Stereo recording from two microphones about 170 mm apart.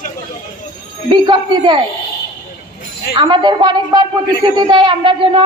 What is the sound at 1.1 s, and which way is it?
Speech, 25° right (ahead or behind).